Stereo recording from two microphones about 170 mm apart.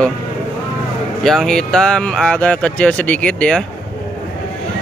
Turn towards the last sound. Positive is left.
turn(degrees=5)  # may be behind; listen again after turning